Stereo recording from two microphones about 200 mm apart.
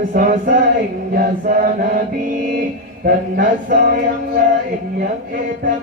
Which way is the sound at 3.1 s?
45° right (ahead or behind).